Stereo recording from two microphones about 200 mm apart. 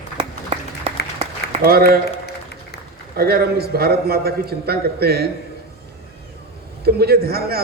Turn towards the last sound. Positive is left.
turn(degrees=-50)  # may be behind; listen again after turning